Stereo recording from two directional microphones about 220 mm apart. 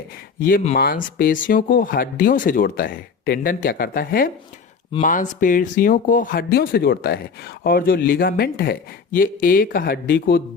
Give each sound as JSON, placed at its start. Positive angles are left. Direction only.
{"t": 0.3, "sound": "speech", "side_deg": 40}